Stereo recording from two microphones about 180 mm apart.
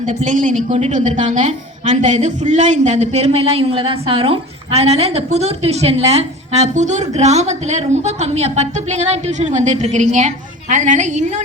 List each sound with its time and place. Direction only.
0.0 s a woman's voice: 40° right (ahead or behind)